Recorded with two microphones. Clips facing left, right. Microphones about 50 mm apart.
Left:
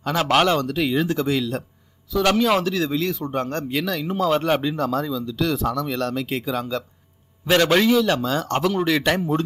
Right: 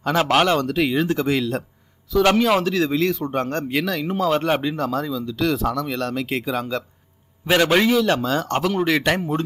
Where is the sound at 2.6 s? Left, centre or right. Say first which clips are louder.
Right 3 dB; right.